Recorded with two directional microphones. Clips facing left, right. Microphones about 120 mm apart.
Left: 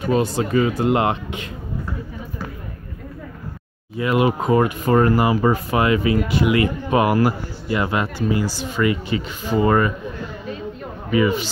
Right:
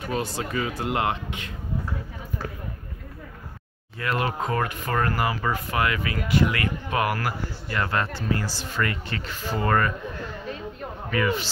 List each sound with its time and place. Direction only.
0.1 s speech: 25° left (ahead or behind)
3.9 s speech: 15° left (ahead or behind)
11.1 s speech: 10° left (ahead or behind)